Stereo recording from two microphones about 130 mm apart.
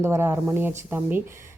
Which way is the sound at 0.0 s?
20° right (ahead or behind).